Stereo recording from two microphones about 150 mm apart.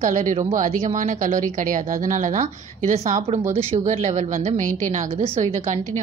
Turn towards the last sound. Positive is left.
turn(degrees=-50)  # may be behind; listen again after turning